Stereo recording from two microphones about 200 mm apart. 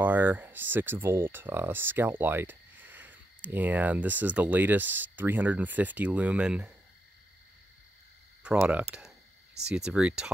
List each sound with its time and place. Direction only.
0.0 s speech: 10° right (ahead or behind)
8.5 s speech: 5° right (ahead or behind)